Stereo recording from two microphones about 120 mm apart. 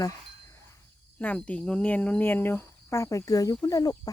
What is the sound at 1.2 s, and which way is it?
Speech, 10° left (ahead or behind).